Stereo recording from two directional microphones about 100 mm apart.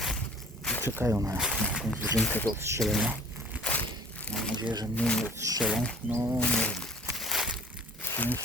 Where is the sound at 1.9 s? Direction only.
10° left (ahead or behind).